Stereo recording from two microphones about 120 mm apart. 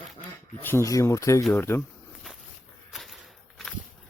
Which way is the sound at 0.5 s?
15° left (ahead or behind).